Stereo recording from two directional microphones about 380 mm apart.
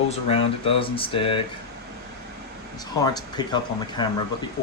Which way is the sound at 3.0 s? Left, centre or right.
Centre.